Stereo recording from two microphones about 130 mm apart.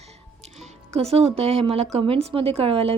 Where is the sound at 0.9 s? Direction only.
50° right (ahead or behind).